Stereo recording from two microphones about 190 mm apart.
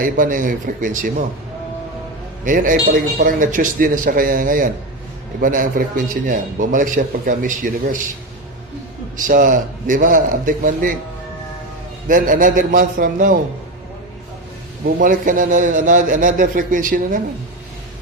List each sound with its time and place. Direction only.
0.0 s a man's voice: 45° right (ahead or behind)
2.4 s a man's voice: 45° right (ahead or behind)
9.1 s a man's voice: 45° right (ahead or behind)
12.0 s a man's voice: 45° right (ahead or behind)
14.8 s a man's voice: 45° right (ahead or behind)